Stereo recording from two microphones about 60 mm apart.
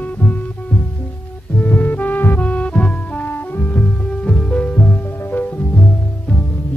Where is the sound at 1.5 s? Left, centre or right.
Left.